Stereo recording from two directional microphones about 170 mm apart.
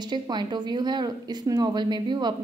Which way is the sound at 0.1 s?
25° right (ahead or behind).